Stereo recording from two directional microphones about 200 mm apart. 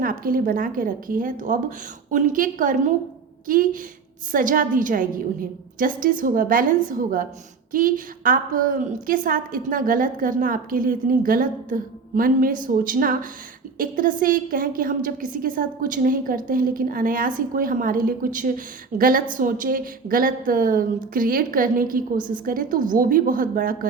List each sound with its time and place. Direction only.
0.0 s a woman's voice: 45° right (ahead or behind)